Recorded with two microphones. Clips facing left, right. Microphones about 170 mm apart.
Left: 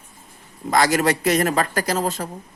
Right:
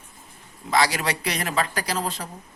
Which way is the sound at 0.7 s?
45° left (ahead or behind).